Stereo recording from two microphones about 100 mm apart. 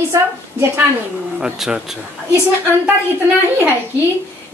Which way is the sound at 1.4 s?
10° right (ahead or behind).